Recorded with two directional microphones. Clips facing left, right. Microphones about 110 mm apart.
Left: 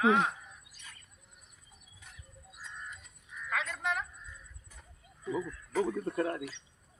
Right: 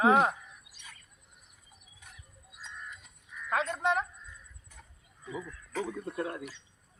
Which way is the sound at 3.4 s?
35° right (ahead or behind).